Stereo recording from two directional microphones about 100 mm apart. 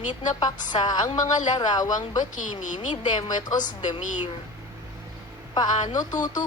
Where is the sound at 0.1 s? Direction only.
45° left (ahead or behind).